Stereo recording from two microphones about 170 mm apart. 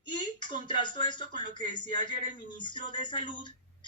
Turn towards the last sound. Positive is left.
turn(degrees=30)  # may be behind; listen again after turning